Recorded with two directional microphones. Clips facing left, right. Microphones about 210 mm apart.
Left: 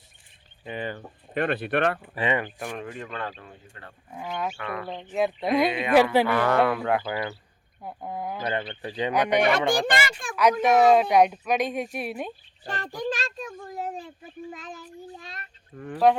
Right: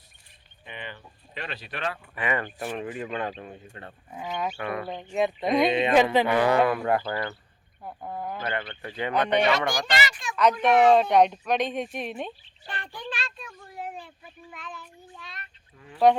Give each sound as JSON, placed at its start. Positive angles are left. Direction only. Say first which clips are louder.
{"t": 0.6, "sound": "a child's voice", "louder": "left 8 dB", "side_deg": 40}
{"t": 2.1, "sound": "speech", "louder": "right 1 dB", "side_deg": 25}
{"t": 2.6, "sound": "speech", "louder": "right 2 dB", "side_deg": -5}
{"t": 4.1, "sound": "speech", "louder": "even", "side_deg": -5}
{"t": 4.5, "sound": "speech", "louder": "right 2 dB", "side_deg": -25}
{"t": 4.9, "sound": "speech", "louder": "left 2 dB", "side_deg": 0}
{"t": 5.6, "sound": "speech", "louder": "even", "side_deg": -25}
{"t": 6.7, "sound": "speech", "louder": "even", "side_deg": 0}
{"t": 9.8, "sound": "a child's voice", "louder": "left 2 dB", "side_deg": 50}
{"t": 10.6, "sound": "speech", "louder": "even", "side_deg": 10}
{"t": 12.6, "sound": "a child's voice", "louder": "left 7 dB", "side_deg": 40}